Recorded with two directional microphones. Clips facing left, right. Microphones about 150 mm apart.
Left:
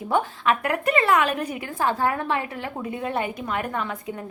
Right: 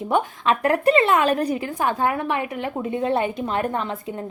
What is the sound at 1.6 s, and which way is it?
A woman's voice, 20° right (ahead or behind).